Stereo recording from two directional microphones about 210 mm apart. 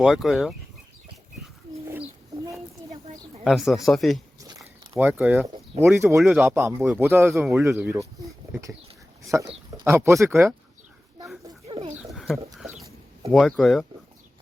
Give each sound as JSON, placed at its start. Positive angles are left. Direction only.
{"t": 0.0, "sound": "speech", "side_deg": 0}
{"t": 1.9, "sound": "bird", "side_deg": -15}
{"t": 3.4, "sound": "speech", "side_deg": 0}
{"t": 4.4, "sound": "biting", "side_deg": -15}
{"t": 5.2, "sound": "speech", "side_deg": -10}
{"t": 9.2, "sound": "speech", "side_deg": -15}
{"t": 11.6, "sound": "a sound", "side_deg": -25}
{"t": 12.1, "sound": "bird", "side_deg": 0}
{"t": 13.3, "sound": "speech", "side_deg": 0}